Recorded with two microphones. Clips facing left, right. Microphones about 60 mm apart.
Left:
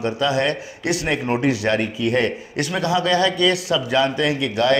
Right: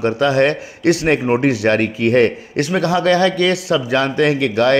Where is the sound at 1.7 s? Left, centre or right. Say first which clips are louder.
Right 5 dB; right.